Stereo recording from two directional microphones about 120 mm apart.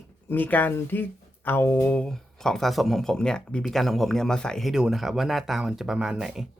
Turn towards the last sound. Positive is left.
turn(degrees=-5)  # may be behind; listen again after turning